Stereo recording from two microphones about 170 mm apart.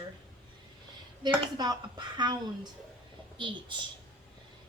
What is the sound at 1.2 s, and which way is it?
A woman's voice, 25° right (ahead or behind).